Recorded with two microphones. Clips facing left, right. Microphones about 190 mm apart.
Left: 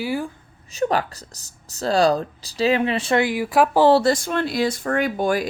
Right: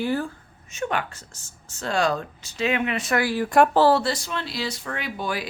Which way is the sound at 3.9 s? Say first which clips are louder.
Left 5 dB; 45° left (ahead or behind).